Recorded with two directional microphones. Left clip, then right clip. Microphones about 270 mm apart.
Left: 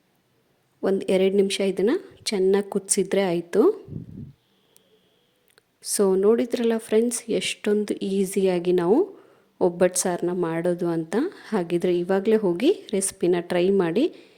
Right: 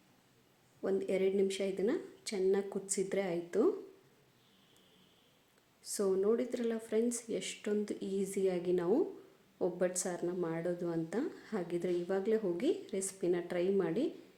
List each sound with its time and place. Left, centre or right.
0.8 s a woman's voice: left
5.8 s a woman's voice: left